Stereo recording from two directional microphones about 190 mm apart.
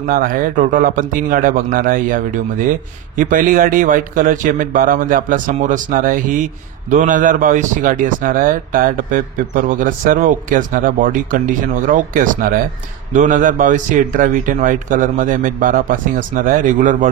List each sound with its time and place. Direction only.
0.0 s speech: 45° right (ahead or behind)